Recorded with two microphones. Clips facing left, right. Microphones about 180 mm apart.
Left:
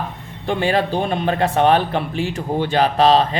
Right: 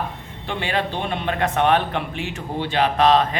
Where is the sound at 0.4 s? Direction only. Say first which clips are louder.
Left 6 dB; 40° left (ahead or behind).